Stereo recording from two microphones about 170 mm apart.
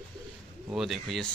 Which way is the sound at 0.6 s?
Centre (ahead or behind).